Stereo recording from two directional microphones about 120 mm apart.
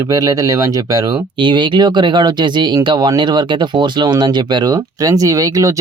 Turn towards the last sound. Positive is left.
turn(degrees=-30)  # may be behind; listen again after turning